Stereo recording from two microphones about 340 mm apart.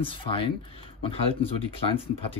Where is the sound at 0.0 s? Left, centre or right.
Centre.